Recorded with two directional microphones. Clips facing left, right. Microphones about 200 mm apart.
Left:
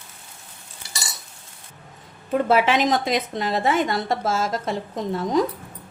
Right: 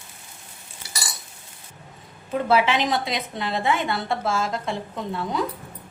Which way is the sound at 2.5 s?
45° left (ahead or behind).